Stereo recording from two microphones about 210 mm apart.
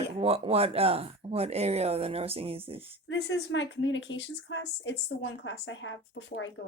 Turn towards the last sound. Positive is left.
turn(degrees=55)  # may be behind; listen again after turning